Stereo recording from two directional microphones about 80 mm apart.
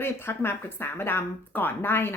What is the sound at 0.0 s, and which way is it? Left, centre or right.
Speech, left.